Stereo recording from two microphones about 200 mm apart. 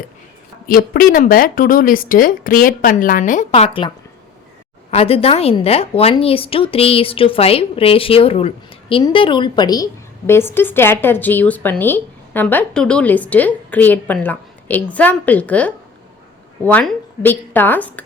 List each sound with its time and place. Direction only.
0.7 s a woman's voice: 45° left (ahead or behind); by 18.0 s 10° left (ahead or behind)